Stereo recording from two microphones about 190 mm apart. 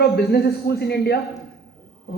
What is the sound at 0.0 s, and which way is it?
A woman's voice, 55° left (ahead or behind).